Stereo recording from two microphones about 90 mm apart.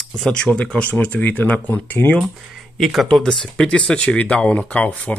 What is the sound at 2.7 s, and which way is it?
Speech, centre (ahead or behind).